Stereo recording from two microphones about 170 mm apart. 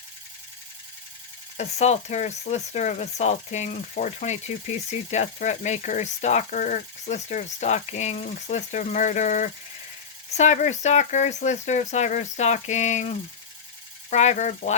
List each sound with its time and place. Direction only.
1.5 s speech: 40° left (ahead or behind)